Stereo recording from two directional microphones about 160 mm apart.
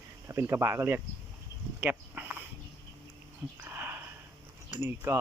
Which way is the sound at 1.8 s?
10° right (ahead or behind).